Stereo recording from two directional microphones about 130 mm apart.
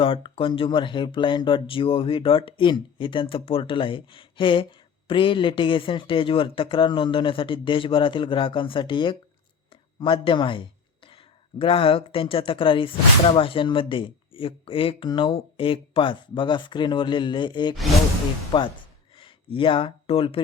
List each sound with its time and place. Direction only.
0.0 s speech: 40° left (ahead or behind)
10.0 s a sound: 40° left (ahead or behind)
11.6 s speech: 45° left (ahead or behind)